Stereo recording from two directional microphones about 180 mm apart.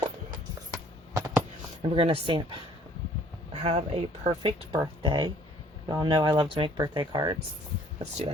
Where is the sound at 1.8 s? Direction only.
30° right (ahead or behind).